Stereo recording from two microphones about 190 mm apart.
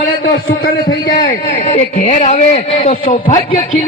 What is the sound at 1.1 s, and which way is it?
A man's voice, 40° left (ahead or behind).